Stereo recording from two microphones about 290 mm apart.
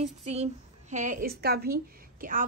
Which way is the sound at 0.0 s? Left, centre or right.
Right.